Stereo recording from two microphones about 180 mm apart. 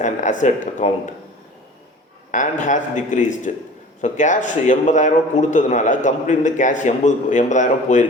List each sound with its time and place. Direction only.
0.0 s a man's voice: 45° left (ahead or behind)
2.3 s a man's voice: 45° left (ahead or behind)